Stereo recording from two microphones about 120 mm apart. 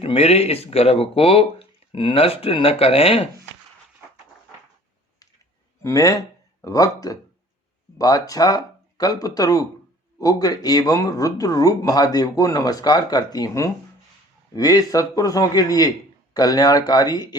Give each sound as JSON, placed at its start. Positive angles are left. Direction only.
{"t": 0.0, "sound": "speech", "side_deg": 55}
{"t": 5.8, "sound": "speech", "side_deg": 25}